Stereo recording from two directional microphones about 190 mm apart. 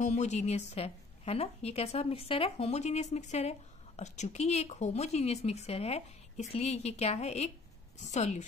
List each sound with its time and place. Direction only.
0.0 s a woman's voice: 35° left (ahead or behind)